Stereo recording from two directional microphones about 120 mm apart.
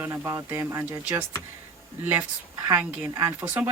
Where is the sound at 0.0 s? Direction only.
25° right (ahead or behind).